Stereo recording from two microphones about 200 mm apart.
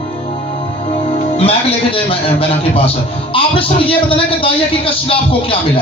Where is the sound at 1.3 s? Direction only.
30° left (ahead or behind).